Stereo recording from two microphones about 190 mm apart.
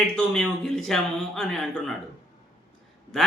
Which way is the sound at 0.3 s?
Centre (ahead or behind).